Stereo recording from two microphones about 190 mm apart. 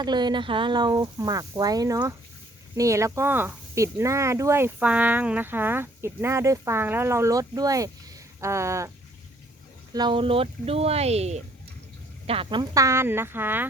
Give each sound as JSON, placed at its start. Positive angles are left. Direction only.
{"t": 0.0, "sound": "speech", "side_deg": -25}
{"t": 9.9, "sound": "speech", "side_deg": -25}